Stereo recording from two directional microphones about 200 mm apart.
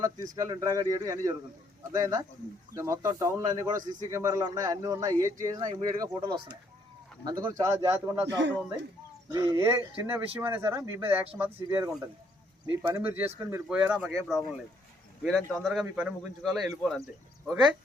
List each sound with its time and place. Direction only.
0.0 s speech: 15° right (ahead or behind); by 16.9 s centre (ahead or behind)